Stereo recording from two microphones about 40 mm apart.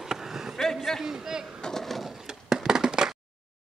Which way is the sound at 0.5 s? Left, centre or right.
Centre.